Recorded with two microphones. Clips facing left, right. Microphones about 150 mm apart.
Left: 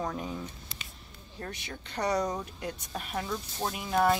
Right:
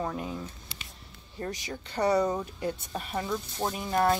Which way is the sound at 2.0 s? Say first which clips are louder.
Right 4 dB; 5° right (ahead or behind).